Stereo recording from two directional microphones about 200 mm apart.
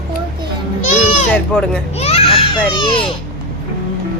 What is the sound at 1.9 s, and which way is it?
Baby cry, 30° left (ahead or behind).